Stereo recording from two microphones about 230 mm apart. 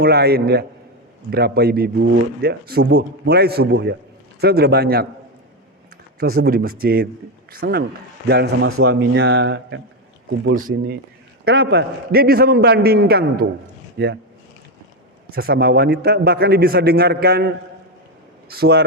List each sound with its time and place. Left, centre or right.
0.0 s a man's voice: right
6.1 s a man's voice: right
10.5 s a man's voice: right
15.3 s a man's voice: right